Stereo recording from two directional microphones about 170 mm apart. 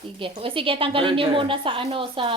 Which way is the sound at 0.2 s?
30° right (ahead or behind).